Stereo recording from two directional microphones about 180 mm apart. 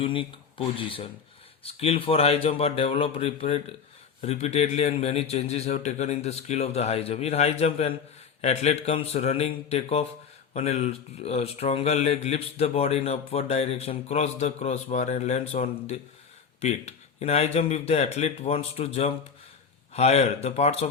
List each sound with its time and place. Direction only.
0.0 s speech: 30° left (ahead or behind)